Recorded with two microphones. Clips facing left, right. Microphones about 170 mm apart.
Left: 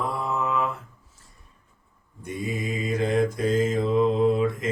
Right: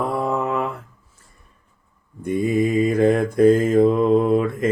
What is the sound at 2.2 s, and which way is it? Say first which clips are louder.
Mantra: right 11 dB; 55° right (ahead or behind).